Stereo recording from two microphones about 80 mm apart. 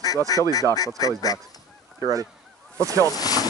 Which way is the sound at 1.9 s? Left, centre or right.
Right.